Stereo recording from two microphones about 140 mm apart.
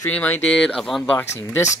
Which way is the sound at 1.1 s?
20° left (ahead or behind).